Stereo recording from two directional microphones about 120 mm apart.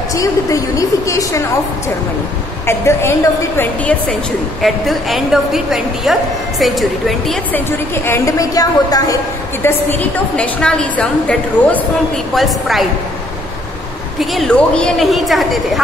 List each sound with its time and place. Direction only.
0.1 s a woman's voice: 25° left (ahead or behind)
2.6 s a woman's voice: 20° left (ahead or behind)
4.6 s a woman's voice: centre (ahead or behind)
7.5 s a woman's voice: 20° left (ahead or behind)
9.6 s a woman's voice: 20° left (ahead or behind); by 12.8 s centre (ahead or behind)
14.3 s a woman's voice: 5° left (ahead or behind)